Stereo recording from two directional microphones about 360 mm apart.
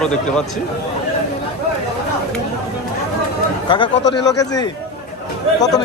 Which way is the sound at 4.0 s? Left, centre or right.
Left.